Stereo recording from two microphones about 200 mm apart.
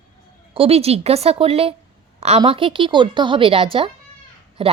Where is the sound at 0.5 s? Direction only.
30° right (ahead or behind).